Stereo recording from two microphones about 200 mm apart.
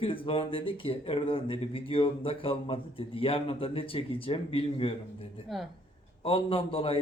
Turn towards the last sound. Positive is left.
turn(degrees=25)  # may be behind; listen again after turning